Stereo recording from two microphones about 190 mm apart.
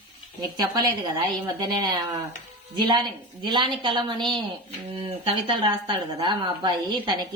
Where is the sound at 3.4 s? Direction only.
25° right (ahead or behind).